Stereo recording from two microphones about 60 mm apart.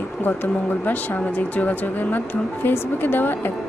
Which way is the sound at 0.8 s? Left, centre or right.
Left.